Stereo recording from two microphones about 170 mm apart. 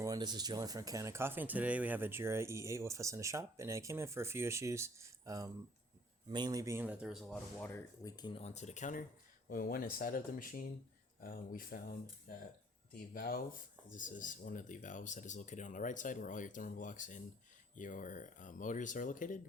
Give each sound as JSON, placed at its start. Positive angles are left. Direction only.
{"t": 0.0, "sound": "speech", "side_deg": -25}
{"t": 7.6, "sound": "speech", "side_deg": 15}
{"t": 8.1, "sound": "speech", "side_deg": 25}
{"t": 8.4, "sound": "speech", "side_deg": 40}